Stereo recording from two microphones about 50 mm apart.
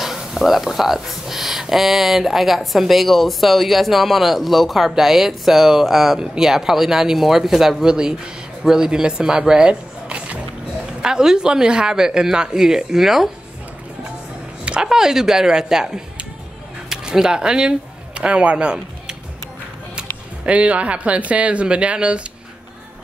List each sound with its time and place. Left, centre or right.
0.0 s speech: centre
14.6 s speech: centre
20.0 s a sound: right
21.3 s speech: right